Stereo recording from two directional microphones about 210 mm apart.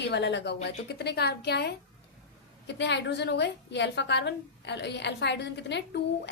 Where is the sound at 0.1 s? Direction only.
55° left (ahead or behind).